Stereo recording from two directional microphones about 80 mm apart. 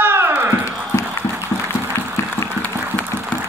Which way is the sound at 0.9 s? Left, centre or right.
Left.